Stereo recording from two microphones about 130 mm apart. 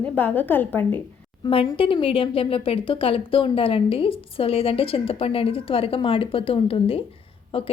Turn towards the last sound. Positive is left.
turn(degrees=45)  # may be behind; listen again after turning